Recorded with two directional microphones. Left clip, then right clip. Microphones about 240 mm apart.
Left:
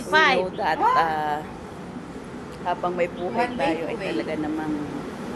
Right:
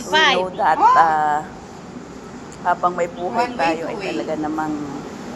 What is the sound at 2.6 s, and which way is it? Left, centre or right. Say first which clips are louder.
Speech: right 6 dB; centre.